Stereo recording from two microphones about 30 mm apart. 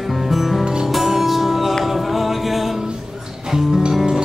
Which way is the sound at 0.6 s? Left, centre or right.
Right.